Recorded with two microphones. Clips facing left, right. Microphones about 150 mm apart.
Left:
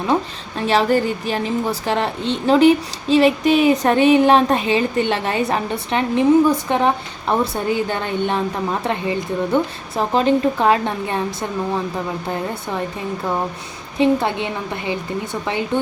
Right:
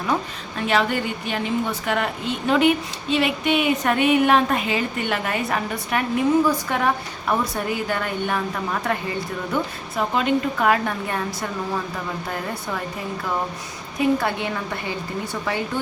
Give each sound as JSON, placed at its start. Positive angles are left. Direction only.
{"t": 0.1, "sound": "a woman's voice", "side_deg": 30}
{"t": 14.0, "sound": "a woman's voice", "side_deg": 20}